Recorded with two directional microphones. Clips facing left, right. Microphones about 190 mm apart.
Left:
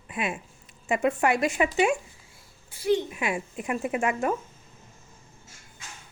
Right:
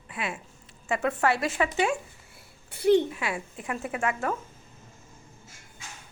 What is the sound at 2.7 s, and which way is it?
Speech, 60° right (ahead or behind).